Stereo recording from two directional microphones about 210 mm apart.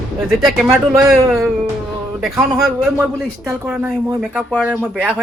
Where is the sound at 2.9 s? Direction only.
10° right (ahead or behind).